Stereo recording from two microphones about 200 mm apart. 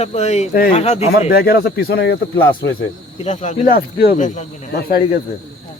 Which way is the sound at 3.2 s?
40° left (ahead or behind).